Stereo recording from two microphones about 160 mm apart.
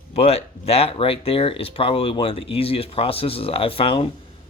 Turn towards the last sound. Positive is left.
turn(degrees=35)  # may be behind; listen again after turning